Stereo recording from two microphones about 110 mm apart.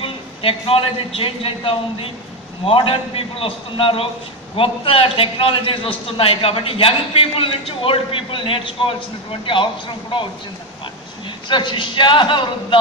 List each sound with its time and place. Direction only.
0.0 s a man's voice: 55° left (ahead or behind)
11.4 s a man's voice: 45° left (ahead or behind)